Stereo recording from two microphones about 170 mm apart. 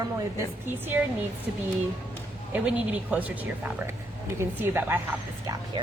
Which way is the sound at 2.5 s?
10° right (ahead or behind).